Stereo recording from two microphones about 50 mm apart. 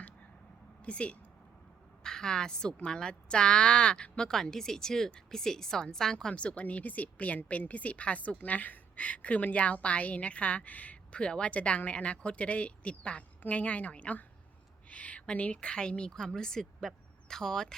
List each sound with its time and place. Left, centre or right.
0.8 s speech: left
2.0 s a woman's voice: centre